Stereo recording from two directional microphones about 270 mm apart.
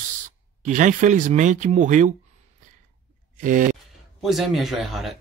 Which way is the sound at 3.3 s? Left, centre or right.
Right.